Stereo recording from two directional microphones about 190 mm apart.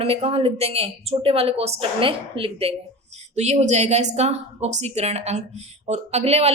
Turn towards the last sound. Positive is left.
turn(degrees=-35)  # may be behind; listen again after turning